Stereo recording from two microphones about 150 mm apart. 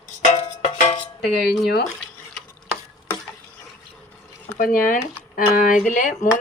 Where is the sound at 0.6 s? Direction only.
45° left (ahead or behind).